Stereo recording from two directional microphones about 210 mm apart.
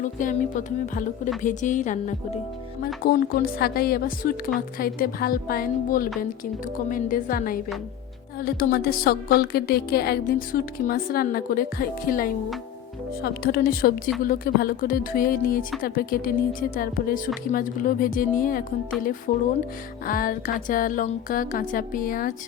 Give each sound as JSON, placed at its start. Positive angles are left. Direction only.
{"t": 0.0, "sound": "a woman's voice", "side_deg": 40}